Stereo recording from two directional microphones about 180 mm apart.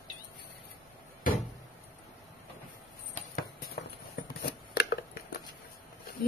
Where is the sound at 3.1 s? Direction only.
50° left (ahead or behind).